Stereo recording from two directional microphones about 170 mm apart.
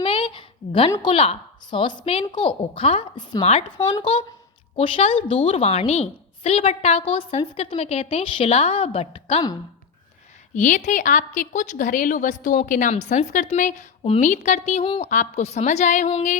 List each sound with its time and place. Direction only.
0.0 s a sound: 30° left (ahead or behind)
0.9 s a woman's voice: 30° left (ahead or behind)
10.5 s a woman's voice: 45° left (ahead or behind)